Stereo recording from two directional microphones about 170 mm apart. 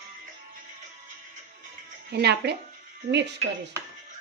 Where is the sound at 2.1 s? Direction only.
75° right (ahead or behind).